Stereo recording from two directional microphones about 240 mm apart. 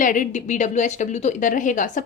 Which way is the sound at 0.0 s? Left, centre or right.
Left.